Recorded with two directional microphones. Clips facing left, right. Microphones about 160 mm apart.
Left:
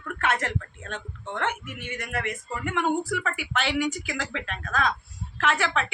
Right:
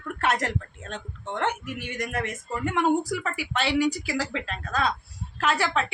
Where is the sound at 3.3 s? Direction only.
35° right (ahead or behind).